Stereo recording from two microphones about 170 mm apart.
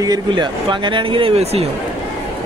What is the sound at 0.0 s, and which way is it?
Speech, 25° right (ahead or behind).